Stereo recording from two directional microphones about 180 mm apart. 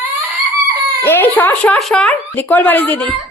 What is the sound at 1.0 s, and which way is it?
Speech, 10° left (ahead or behind).